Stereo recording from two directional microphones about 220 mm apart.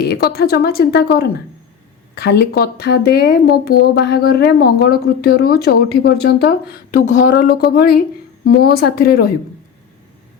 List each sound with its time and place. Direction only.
0.0 s speech: 45° left (ahead or behind)
6.9 s speech: 35° left (ahead or behind)